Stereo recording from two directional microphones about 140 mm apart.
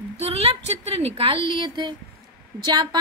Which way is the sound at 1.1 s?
40° right (ahead or behind).